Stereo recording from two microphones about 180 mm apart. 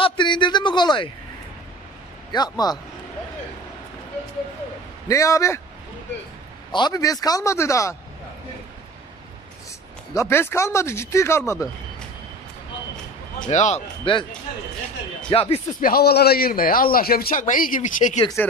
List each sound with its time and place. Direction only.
0.0 s a man's voice: 25° left (ahead or behind)
2.3 s a man's voice: 20° left (ahead or behind)
5.0 s speech: 15° left (ahead or behind)
6.7 s a man's voice: 25° left (ahead or behind)
10.1 s speech: 15° left (ahead or behind)
13.5 s speech: 40° left (ahead or behind)
15.2 s speech: 30° left (ahead or behind)
15.8 s a man's voice: 60° left (ahead or behind)